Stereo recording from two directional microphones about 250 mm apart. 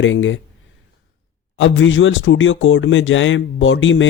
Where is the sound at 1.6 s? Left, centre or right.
Left.